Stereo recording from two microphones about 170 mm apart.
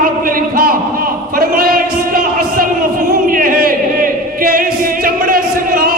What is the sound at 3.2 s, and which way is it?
Singing, 55° right (ahead or behind).